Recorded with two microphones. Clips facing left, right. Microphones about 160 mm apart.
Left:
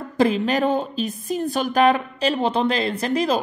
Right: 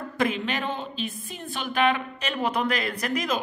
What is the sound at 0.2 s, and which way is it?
A man's voice, 35° left (ahead or behind).